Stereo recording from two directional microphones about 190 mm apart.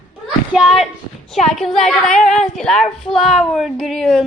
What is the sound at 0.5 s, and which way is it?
Speech, centre (ahead or behind).